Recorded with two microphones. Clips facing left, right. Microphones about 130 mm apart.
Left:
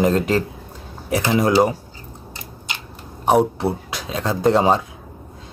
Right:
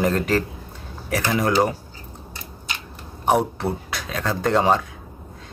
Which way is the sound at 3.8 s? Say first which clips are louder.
Left 2 dB; 20° left (ahead or behind).